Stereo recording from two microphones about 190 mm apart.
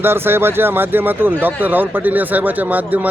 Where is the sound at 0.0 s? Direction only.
10° right (ahead or behind).